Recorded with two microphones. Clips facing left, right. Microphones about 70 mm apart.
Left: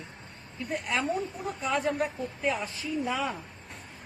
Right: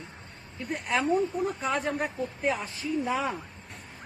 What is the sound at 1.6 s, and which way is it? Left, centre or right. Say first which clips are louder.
Speech: left 1 dB; right.